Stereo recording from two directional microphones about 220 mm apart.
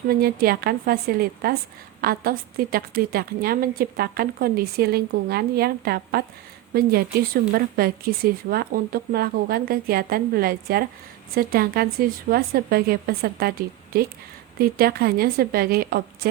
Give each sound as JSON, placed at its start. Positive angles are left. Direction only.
{"t": 0.1, "sound": "a woman's voice", "side_deg": -45}